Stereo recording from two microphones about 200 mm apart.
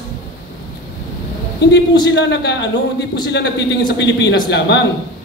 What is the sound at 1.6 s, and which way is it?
A woman's voice, 60° left (ahead or behind).